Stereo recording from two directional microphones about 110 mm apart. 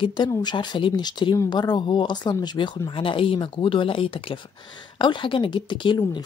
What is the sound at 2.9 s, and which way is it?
Speech, 50° left (ahead or behind).